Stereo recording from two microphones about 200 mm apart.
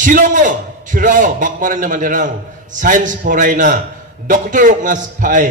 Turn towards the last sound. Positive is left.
turn(degrees=-40)  # may be behind; listen again after turning